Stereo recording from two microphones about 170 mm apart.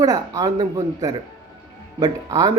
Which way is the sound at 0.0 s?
20° right (ahead or behind).